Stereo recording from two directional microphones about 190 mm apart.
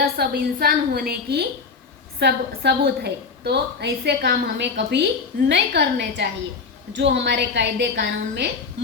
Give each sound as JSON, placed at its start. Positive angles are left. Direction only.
{"t": 0.0, "sound": "a woman's voice", "side_deg": -55}